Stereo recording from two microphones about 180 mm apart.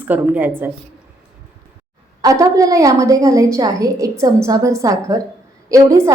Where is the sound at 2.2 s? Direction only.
20° right (ahead or behind).